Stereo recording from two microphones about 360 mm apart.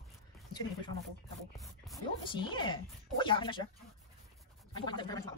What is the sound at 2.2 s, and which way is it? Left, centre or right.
Speech, centre.